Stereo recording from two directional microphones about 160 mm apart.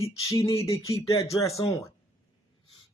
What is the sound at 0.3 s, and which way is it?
A man's voice, 20° left (ahead or behind).